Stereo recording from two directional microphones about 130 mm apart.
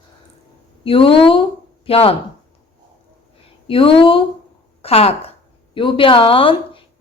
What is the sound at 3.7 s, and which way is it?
A woman's voice, 45° left (ahead or behind).